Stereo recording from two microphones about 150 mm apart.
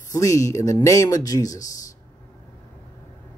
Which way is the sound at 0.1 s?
20° left (ahead or behind).